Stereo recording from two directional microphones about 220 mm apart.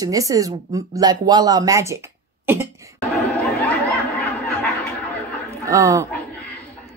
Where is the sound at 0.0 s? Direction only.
15° right (ahead or behind).